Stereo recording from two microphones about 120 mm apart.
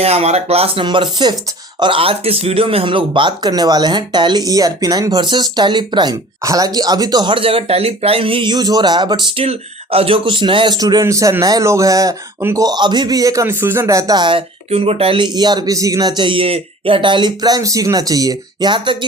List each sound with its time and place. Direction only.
0.0 s speech: 60° right (ahead or behind); by 12.6 s 25° right (ahead or behind)
12.6 s speech: 35° right (ahead or behind)